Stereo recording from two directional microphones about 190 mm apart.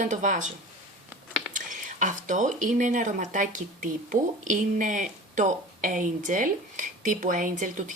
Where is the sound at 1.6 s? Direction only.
40° right (ahead or behind).